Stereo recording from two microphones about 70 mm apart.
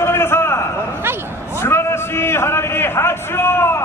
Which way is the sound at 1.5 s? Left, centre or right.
Left.